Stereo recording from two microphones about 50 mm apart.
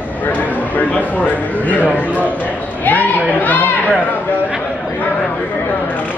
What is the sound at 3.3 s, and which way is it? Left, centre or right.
Chatter, left.